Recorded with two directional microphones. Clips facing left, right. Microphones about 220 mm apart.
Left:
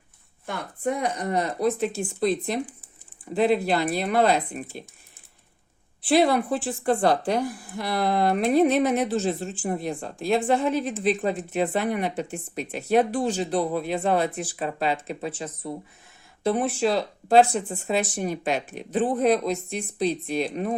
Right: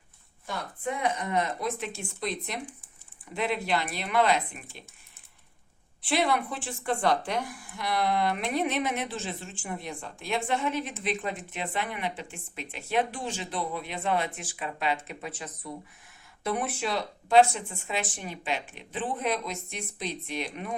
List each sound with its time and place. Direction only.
0.4 s a woman's voice: 45° left (ahead or behind)
6.0 s a woman's voice: 35° left (ahead or behind)